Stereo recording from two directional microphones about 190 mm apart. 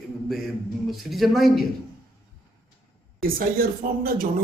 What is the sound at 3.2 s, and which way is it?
Speech, 50° right (ahead or behind).